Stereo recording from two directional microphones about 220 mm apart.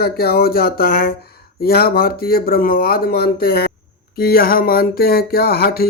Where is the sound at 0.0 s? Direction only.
45° left (ahead or behind).